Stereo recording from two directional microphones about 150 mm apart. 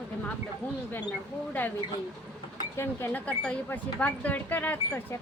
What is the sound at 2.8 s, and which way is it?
A woman's voice, 15° left (ahead or behind).